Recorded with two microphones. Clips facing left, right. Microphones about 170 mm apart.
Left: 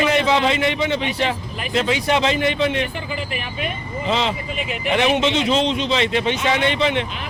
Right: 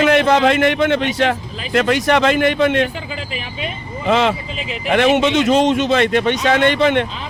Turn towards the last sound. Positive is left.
turn(degrees=-55)  # may be behind; listen again after turning